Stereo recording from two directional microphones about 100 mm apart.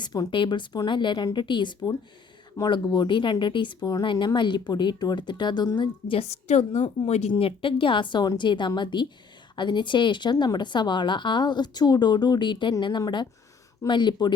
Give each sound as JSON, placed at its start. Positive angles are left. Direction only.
{"t": 0.0, "sound": "speech", "side_deg": 40}
{"t": 0.3, "sound": "a woman's voice", "side_deg": 55}
{"t": 6.8, "sound": "a woman's voice", "side_deg": 80}